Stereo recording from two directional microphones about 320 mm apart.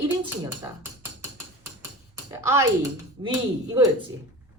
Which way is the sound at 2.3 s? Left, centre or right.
Centre.